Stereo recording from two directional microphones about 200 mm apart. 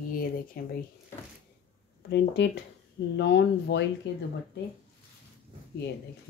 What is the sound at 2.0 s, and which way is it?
Speech, 60° left (ahead or behind).